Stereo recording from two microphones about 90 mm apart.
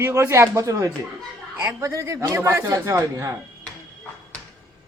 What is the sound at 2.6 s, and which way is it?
Speech, 40° right (ahead or behind).